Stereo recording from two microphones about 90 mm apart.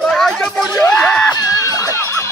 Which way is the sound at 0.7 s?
25° left (ahead or behind).